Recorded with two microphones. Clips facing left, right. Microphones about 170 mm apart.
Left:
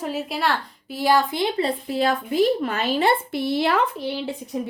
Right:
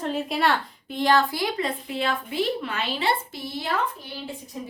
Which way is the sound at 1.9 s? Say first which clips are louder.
Left 5 dB; 40° left (ahead or behind).